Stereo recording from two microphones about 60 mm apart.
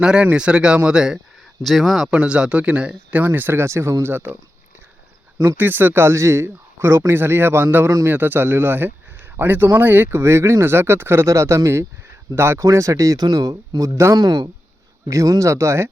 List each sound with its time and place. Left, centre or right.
0.0 s speech: centre
1.6 s speech: centre
2.0 s speech: centre
3.1 s speech: right
3.7 s speech: right
5.4 s speech: right
12.5 s speech: right
15.1 s speech: right